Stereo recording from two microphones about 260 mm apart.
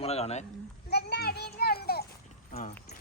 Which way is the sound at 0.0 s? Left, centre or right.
Left.